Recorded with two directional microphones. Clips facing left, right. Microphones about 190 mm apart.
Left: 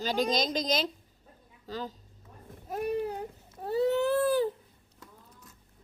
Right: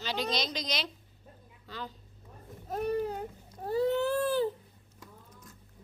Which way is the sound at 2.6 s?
10° left (ahead or behind).